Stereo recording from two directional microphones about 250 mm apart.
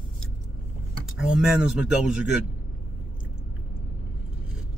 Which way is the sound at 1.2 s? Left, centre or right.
Centre.